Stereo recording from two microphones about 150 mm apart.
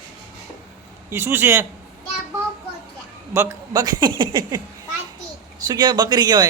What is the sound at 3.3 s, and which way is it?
A man's voice, 20° right (ahead or behind).